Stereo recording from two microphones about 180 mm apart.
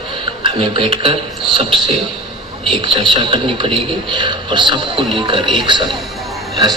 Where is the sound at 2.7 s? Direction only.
30° right (ahead or behind).